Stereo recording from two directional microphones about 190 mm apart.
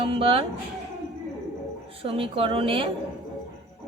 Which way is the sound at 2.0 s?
30° right (ahead or behind).